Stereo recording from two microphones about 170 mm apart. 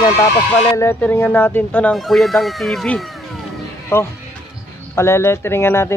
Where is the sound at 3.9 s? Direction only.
15° left (ahead or behind).